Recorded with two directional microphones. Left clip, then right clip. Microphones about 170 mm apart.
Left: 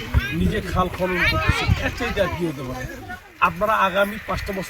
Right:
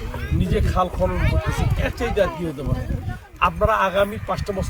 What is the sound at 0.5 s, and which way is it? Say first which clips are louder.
Speech: right 4 dB; 30° right (ahead or behind).